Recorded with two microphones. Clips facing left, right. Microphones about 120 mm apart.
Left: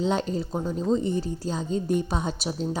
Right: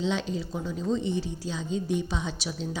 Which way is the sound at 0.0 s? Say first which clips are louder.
Left 3 dB; 45° left (ahead or behind).